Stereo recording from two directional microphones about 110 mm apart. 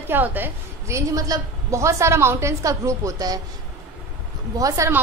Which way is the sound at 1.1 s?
30° right (ahead or behind).